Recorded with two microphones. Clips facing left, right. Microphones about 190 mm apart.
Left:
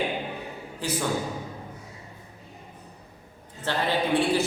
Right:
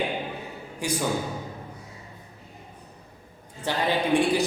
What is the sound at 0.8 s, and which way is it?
Speech, 15° right (ahead or behind).